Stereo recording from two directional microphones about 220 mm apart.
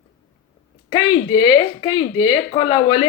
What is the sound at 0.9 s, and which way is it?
Speech, 20° left (ahead or behind).